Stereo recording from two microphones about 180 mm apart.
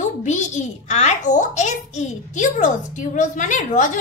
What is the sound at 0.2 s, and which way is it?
A child's voice, 40° left (ahead or behind).